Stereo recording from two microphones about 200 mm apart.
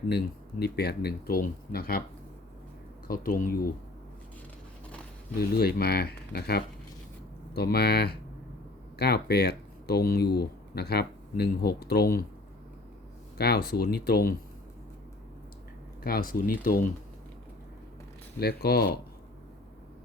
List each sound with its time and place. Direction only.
0.6 s speech: 55° left (ahead or behind)
3.1 s speech: 45° left (ahead or behind)
5.4 s speech: 50° left (ahead or behind)
13.4 s speech: 50° left (ahead or behind)
16.0 s speech: 45° left (ahead or behind)
18.3 s speech: 50° left (ahead or behind)